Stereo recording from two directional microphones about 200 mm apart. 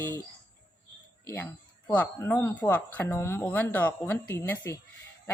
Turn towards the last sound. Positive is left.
turn(degrees=15)  # may be behind; listen again after turning